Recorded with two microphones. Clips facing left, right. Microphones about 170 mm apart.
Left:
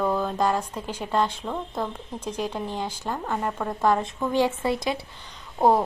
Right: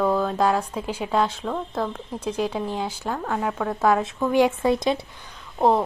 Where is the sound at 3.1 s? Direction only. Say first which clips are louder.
Right 2 dB; 5° left (ahead or behind).